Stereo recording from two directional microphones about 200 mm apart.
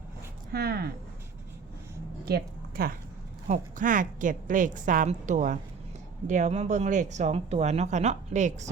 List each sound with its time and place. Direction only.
0.5 s speech: 50° right (ahead or behind)
2.2 s a woman's voice: 50° right (ahead or behind)